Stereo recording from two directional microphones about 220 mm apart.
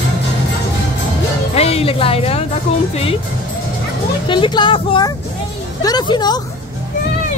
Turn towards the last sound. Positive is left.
turn(degrees=20)  # may be behind; listen again after turning